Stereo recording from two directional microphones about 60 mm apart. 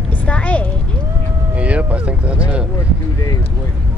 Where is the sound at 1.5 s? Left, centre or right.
Right.